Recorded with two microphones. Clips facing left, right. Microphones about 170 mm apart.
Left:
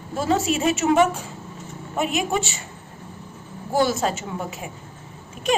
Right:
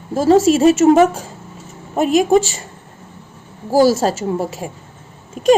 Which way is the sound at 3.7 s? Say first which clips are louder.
Right 8 dB; 35° right (ahead or behind).